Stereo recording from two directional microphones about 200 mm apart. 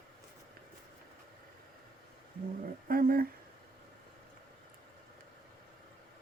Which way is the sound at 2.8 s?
45° right (ahead or behind).